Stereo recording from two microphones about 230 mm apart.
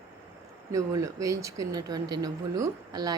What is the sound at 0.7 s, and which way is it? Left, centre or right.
Speech, centre.